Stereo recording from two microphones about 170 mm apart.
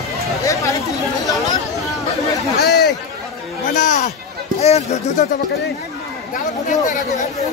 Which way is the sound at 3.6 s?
50° left (ahead or behind).